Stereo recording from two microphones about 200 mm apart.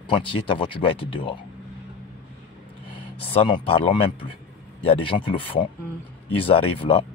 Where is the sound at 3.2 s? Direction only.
25° left (ahead or behind).